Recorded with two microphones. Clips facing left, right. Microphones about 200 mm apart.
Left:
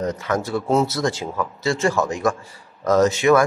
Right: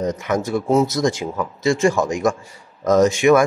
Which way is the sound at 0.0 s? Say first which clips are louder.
Right 2 dB; 20° right (ahead or behind).